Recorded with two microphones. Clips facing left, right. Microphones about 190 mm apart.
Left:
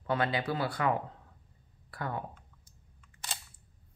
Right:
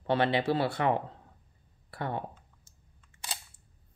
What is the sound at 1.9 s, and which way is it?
Clicking, 25° right (ahead or behind).